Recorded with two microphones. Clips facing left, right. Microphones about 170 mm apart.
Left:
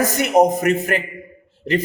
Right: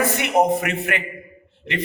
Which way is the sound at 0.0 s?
40° left (ahead or behind).